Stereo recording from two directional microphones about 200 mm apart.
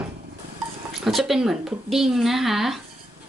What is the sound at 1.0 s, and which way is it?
A woman's voice, centre (ahead or behind).